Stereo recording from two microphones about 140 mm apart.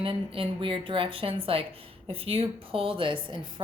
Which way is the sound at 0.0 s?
40° right (ahead or behind).